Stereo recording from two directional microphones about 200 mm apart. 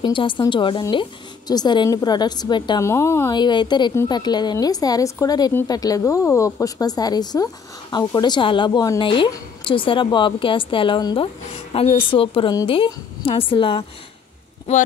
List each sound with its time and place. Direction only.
0.0 s a woman's voice: 25° left (ahead or behind)